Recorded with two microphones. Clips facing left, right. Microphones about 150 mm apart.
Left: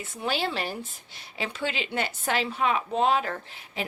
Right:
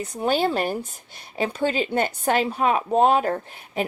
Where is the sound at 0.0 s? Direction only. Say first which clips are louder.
Right 7 dB; 40° right (ahead or behind).